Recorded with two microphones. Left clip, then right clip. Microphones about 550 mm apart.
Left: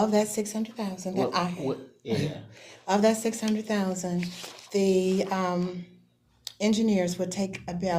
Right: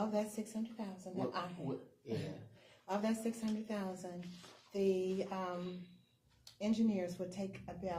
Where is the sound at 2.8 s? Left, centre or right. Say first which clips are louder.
Left 15 dB; left.